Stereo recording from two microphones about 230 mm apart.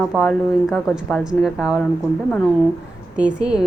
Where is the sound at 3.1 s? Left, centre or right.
Centre.